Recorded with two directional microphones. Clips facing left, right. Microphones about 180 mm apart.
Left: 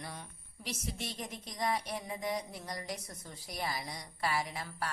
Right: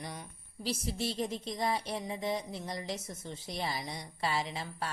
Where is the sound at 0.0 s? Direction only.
15° right (ahead or behind).